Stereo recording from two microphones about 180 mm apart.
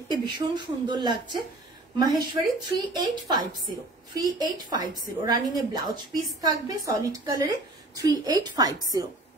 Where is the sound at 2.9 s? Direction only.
20° right (ahead or behind).